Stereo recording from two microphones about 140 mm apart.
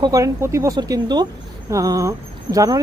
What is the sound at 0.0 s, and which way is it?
Speech, 25° right (ahead or behind).